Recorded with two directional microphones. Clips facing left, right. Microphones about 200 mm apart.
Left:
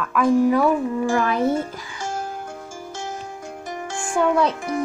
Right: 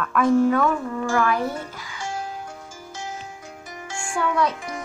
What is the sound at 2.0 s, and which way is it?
Music, 45° left (ahead or behind).